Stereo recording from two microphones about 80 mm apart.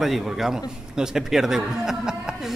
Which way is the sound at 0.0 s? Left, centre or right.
Centre.